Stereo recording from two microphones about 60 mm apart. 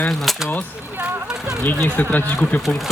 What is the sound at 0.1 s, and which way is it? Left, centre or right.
Speech, centre.